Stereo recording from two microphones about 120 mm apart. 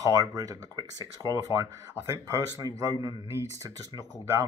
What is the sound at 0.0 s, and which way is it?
Speech, 30° right (ahead or behind).